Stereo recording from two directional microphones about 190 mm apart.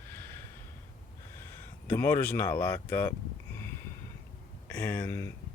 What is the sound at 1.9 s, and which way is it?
Speech, 10° left (ahead or behind).